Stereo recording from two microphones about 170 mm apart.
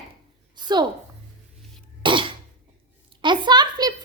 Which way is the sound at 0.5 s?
25° right (ahead or behind).